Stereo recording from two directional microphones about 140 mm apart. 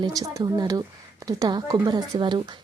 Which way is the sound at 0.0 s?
25° right (ahead or behind).